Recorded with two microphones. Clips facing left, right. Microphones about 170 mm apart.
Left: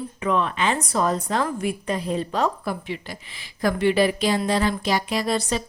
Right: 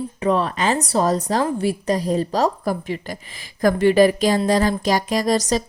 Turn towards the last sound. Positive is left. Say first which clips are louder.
# right 4 dB
turn(degrees=-40)  # may be behind; listen again after turning